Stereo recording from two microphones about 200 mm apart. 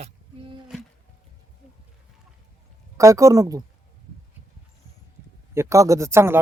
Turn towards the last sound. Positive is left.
turn(degrees=-15)  # may be behind; listen again after turning